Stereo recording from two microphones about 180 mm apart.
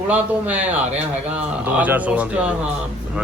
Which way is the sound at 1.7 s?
10° right (ahead or behind).